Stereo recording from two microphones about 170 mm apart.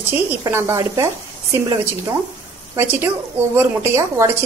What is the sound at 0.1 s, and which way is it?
A woman's voice, 10° right (ahead or behind).